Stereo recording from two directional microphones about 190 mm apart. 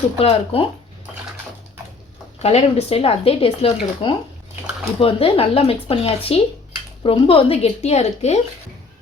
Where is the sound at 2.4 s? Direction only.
35° left (ahead or behind).